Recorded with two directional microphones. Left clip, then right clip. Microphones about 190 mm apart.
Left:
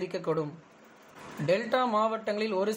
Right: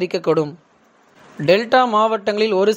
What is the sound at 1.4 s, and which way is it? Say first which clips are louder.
Speech: right 13 dB; 45° right (ahead or behind).